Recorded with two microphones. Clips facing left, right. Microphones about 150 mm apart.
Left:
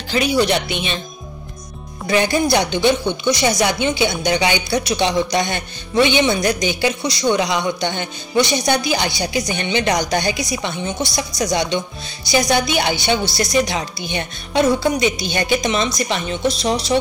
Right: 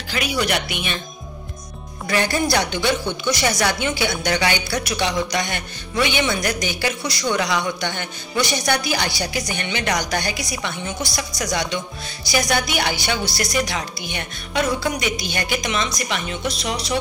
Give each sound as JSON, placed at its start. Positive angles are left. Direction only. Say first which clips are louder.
{"t": 0.1, "sound": "a woman's voice", "louder": "left 6 dB", "side_deg": 30}
{"t": 2.0, "sound": "a woman's voice", "louder": "left 4 dB", "side_deg": 20}